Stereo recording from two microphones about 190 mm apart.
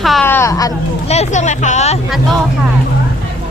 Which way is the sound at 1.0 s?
35° left (ahead or behind).